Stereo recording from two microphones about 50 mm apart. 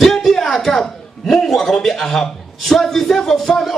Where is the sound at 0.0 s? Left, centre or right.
Centre.